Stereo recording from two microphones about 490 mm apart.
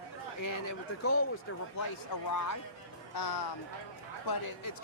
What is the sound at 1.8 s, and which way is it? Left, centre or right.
Speech, left.